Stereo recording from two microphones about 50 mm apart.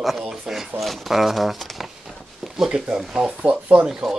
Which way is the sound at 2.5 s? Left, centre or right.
Centre.